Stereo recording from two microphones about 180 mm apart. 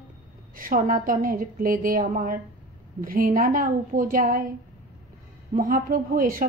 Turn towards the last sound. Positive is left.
turn(degrees=-50)  # may be behind; listen again after turning